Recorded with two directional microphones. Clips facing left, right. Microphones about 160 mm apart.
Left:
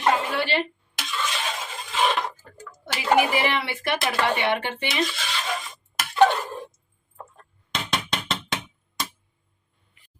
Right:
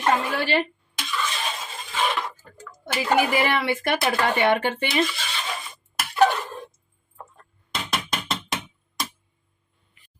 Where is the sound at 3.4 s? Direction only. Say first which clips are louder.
Right 3 dB; 45° right (ahead or behind).